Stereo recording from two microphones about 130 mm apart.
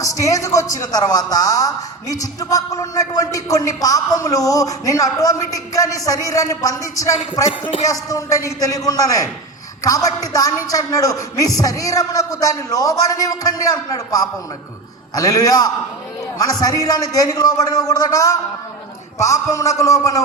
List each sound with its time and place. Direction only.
0.0 s a man's voice: 25° left (ahead or behind)